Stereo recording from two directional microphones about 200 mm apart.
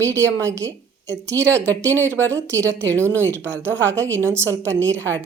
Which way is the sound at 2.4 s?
15° right (ahead or behind).